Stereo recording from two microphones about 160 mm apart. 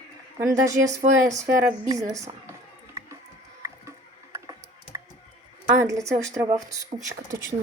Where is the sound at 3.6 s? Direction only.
20° right (ahead or behind).